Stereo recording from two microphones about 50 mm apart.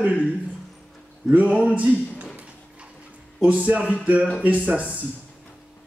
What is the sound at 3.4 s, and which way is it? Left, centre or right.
Speech, right.